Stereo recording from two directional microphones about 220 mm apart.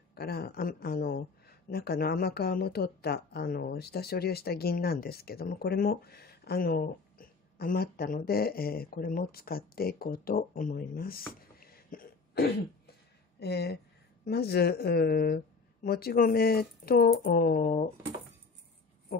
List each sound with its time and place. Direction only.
0.1 s speech: 45° left (ahead or behind)